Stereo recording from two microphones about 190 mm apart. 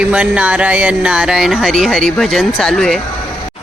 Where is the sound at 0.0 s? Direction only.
5° right (ahead or behind).